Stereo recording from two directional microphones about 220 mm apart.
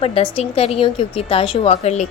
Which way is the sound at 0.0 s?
25° left (ahead or behind).